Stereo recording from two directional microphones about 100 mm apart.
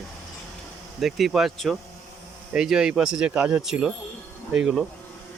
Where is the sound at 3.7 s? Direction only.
5° right (ahead or behind).